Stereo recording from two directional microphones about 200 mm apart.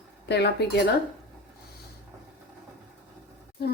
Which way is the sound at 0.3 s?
55° left (ahead or behind).